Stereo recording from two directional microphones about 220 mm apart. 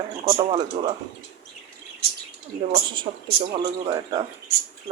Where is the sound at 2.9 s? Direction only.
20° right (ahead or behind).